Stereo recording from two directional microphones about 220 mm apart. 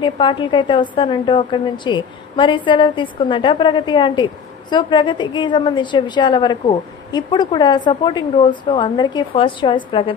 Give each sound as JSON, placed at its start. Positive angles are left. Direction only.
{"t": 0.0, "sound": "a woman's voice", "side_deg": 20}